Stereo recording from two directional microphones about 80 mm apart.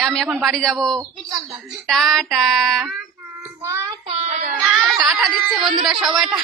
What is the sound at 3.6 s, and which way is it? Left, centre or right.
Child singing, right.